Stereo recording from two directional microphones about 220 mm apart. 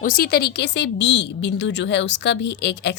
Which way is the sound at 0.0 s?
40° left (ahead or behind).